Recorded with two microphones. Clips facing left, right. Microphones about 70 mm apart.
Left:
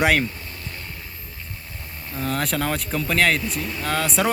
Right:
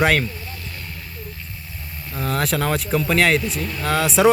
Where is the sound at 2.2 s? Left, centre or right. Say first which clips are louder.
Right 2 dB; centre.